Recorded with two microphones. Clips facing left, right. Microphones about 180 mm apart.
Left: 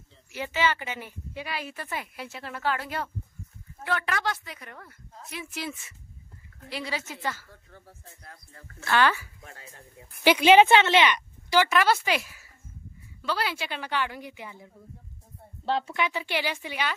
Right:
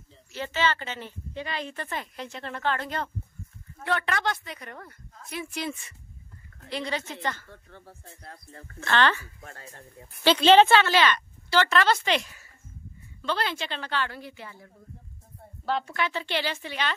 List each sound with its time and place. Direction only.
0.3 s a woman's voice: 10° left (ahead or behind)
8.1 s music: 30° right (ahead or behind)
8.8 s a woman's voice: 10° left (ahead or behind)
9.4 s speech: 45° right (ahead or behind)
10.2 s a woman's voice: 10° left (ahead or behind)